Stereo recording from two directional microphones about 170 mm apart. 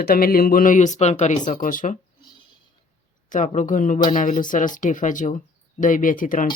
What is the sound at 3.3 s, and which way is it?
Speech, 50° left (ahead or behind).